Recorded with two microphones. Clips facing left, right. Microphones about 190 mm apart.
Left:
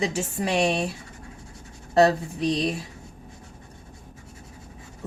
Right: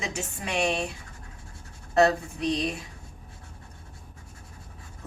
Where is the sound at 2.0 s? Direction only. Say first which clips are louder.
Left 3 dB; 35° left (ahead or behind).